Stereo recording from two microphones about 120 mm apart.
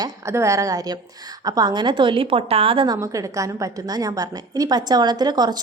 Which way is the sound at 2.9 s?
25° right (ahead or behind).